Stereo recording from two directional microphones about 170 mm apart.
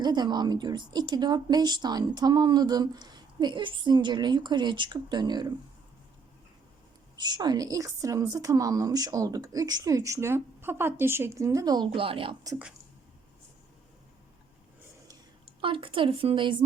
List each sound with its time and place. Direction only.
0.0 s a woman's voice: 25° right (ahead or behind)
7.2 s a woman's voice: 25° right (ahead or behind)
15.6 s a woman's voice: 30° right (ahead or behind)